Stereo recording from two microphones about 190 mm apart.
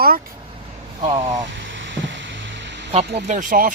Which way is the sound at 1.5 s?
70° right (ahead or behind).